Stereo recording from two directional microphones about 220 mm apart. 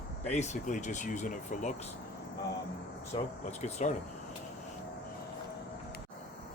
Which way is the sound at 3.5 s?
30° left (ahead or behind).